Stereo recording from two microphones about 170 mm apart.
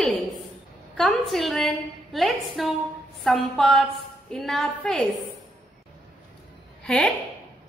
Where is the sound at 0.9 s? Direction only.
Centre (ahead or behind).